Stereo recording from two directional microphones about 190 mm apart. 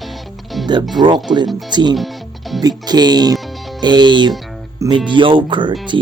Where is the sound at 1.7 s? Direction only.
25° right (ahead or behind).